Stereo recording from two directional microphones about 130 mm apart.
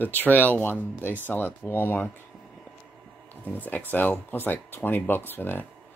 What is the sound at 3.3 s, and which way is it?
Speech, 15° left (ahead or behind).